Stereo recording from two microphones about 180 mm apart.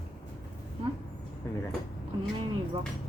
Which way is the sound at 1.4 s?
15° left (ahead or behind).